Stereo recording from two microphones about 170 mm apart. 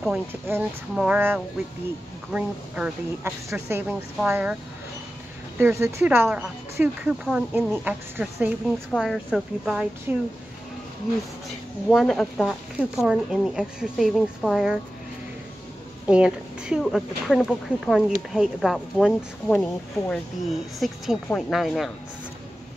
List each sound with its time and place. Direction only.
0.3 s speech: 10° right (ahead or behind)
5.6 s speech: 15° right (ahead or behind)
8.9 s speech: centre (ahead or behind)
11.9 s speech: 5° left (ahead or behind)
16.1 s speech: 5° right (ahead or behind)